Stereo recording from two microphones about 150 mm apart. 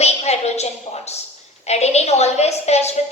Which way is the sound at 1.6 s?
45° left (ahead or behind).